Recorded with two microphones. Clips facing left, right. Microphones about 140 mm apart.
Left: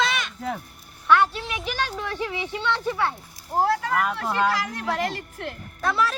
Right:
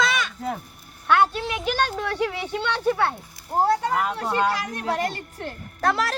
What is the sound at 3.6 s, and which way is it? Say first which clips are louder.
Speech: right 1 dB; 25° right (ahead or behind).